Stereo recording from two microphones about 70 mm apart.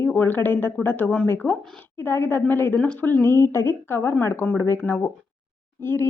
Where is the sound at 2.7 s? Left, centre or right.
Centre; by 4.8 s left.